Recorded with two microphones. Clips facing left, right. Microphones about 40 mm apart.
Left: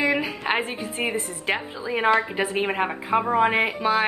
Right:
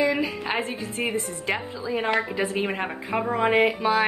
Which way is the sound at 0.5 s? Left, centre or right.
Left.